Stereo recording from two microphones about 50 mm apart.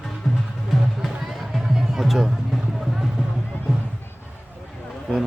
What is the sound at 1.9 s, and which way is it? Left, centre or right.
Music, centre.